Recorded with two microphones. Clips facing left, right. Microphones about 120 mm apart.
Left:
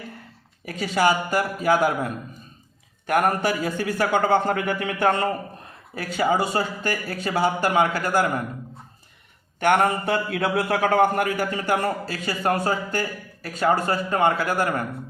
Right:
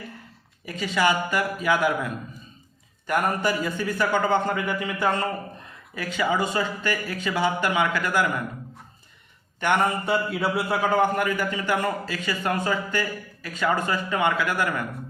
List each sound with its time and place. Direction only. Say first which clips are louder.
0.6 s a man's voice: left 2 dB; 45° left (ahead or behind)
3.1 s speech: left 3 dB; 55° left (ahead or behind)
5.9 s a man's voice: left 3 dB; 40° left (ahead or behind)
9.6 s speech: left 3 dB; 50° left (ahead or behind)
11.0 s a man's voice: left 2 dB; 50° left (ahead or behind)